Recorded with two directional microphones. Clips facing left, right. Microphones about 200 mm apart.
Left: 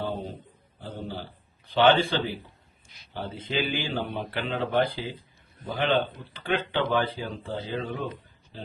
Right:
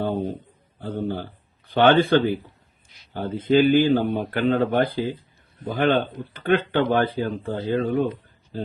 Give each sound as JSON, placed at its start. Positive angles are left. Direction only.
{"t": 0.8, "sound": "speech", "side_deg": -55}